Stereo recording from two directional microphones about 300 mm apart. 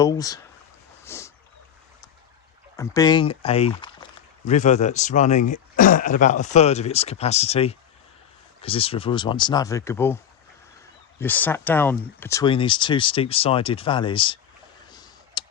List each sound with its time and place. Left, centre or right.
0.0 s speech: centre
1.0 s boat: centre
2.7 s speech: centre
11.2 s speech: centre
14.9 s tick: centre